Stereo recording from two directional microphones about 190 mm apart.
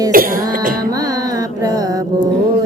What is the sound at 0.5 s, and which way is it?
Carnatic music, 50° right (ahead or behind).